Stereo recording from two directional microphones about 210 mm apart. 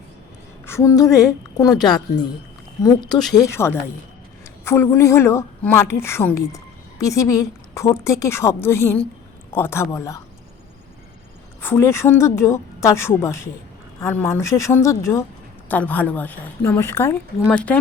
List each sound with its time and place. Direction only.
0.6 s a woman's voice: 10° left (ahead or behind)
3.1 s speech: centre (ahead or behind)
3.3 s a woman's voice: 15° left (ahead or behind)
11.6 s a woman's voice: 10° left (ahead or behind)